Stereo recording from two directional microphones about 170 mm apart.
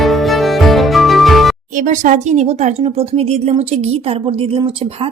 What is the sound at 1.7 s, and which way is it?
Speech, 50° right (ahead or behind).